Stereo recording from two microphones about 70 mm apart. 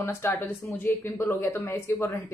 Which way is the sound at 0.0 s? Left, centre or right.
Left.